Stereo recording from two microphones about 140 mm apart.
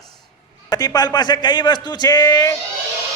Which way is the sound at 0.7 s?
25° left (ahead or behind).